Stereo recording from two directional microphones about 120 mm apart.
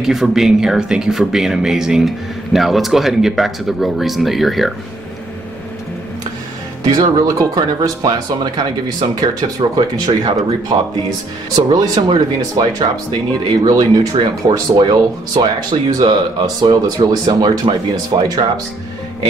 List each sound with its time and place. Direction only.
0.0 s speech: 5° right (ahead or behind)
6.8 s speech: 35° right (ahead or behind)